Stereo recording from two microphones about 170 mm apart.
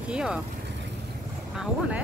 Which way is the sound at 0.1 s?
5° right (ahead or behind).